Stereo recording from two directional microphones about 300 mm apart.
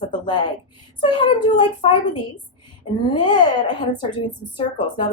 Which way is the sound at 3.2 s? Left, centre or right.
Centre.